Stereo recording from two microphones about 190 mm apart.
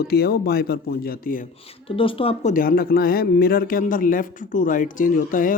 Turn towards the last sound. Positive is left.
turn(degrees=45)  # may be behind; listen again after turning